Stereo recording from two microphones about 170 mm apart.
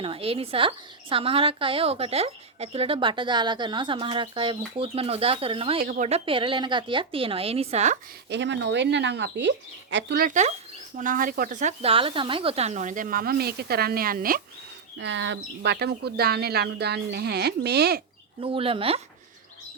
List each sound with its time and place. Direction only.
0.0 s speech: 35° right (ahead or behind)
5.8 s speech: 60° right (ahead or behind)
6.1 s speech: 35° right (ahead or behind)
8.3 s speech: 90° right
10.2 s speech: 45° right (ahead or behind)
14.9 s speech: 90° right; by 18.0 s 70° right (ahead or behind)
18.3 s speech: 30° right (ahead or behind)